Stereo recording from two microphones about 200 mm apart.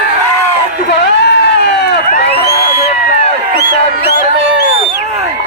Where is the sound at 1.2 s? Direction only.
55° left (ahead or behind).